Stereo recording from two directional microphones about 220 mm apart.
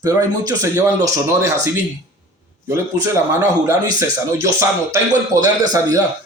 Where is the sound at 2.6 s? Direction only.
15° right (ahead or behind).